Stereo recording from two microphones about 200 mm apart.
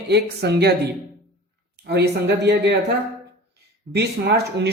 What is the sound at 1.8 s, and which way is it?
Speech, 55° right (ahead or behind).